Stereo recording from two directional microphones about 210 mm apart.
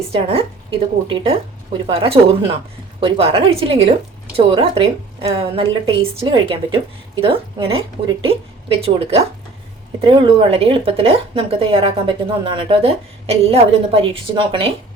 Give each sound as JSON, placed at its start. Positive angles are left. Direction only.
{"t": 0.1, "sound": "speech", "side_deg": -25}